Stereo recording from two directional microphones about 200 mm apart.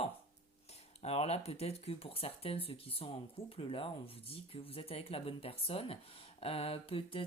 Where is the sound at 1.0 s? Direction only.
30° left (ahead or behind).